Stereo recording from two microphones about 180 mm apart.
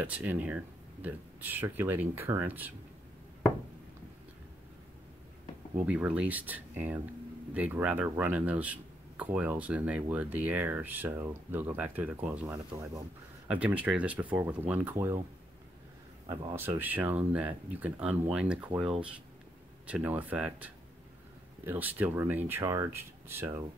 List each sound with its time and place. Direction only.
0.0 s speech: 10° right (ahead or behind)
5.8 s speech: 5° right (ahead or behind)
16.3 s speech: 25° right (ahead or behind)
16.5 s speech: 10° right (ahead or behind)